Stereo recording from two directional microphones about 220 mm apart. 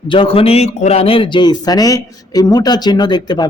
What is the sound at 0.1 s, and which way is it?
A man's voice, 25° left (ahead or behind).